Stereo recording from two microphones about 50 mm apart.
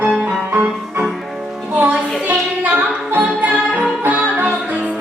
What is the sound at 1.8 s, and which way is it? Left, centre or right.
Music, right.